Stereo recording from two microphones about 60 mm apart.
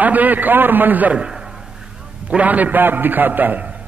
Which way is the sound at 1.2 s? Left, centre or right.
Centre.